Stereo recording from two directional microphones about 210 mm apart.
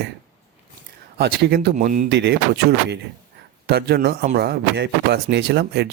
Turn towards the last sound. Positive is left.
turn(degrees=-50)  # may be behind; listen again after turning